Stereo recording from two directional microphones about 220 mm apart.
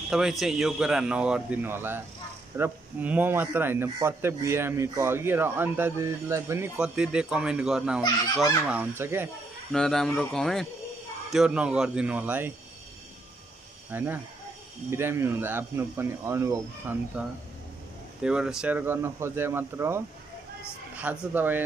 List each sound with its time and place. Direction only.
0.1 s a man's voice: centre (ahead or behind)
9.7 s speech: centre (ahead or behind)
13.8 s a man's voice: 10° right (ahead or behind)